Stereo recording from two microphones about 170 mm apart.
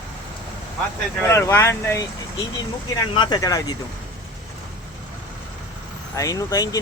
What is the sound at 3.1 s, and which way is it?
Speech, 25° left (ahead or behind).